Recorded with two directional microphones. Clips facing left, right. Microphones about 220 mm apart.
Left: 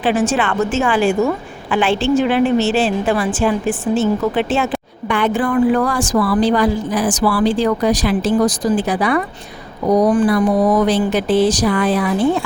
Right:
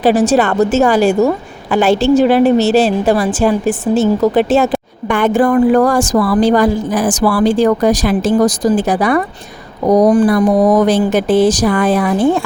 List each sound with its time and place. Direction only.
0.0 s a woman's voice: 35° right (ahead or behind)